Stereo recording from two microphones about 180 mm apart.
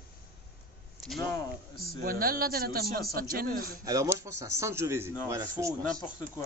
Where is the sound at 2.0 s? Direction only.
55° right (ahead or behind).